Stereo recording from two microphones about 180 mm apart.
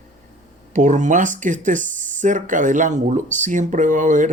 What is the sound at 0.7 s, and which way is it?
Speech, 45° right (ahead or behind).